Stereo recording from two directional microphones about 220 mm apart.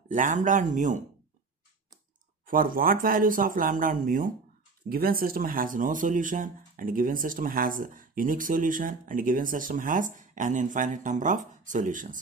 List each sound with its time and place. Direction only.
0.1 s speech: 35° right (ahead or behind)
2.4 s speech: 40° right (ahead or behind)